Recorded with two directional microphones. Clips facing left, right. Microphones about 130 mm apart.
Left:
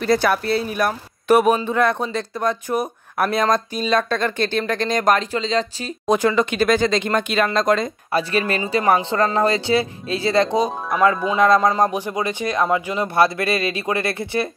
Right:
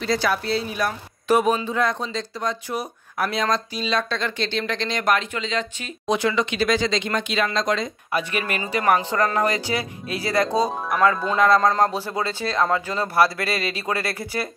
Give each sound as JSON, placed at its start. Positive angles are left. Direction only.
{"t": 0.0, "sound": "speech", "side_deg": 55}
{"t": 6.0, "sound": "speech", "side_deg": 45}
{"t": 8.1, "sound": "speech", "side_deg": 35}